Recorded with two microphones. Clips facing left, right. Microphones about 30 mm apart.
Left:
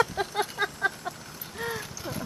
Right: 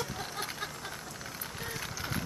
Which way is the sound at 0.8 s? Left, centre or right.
Left.